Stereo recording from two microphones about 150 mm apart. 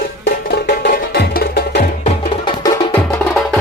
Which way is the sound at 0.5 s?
85° left.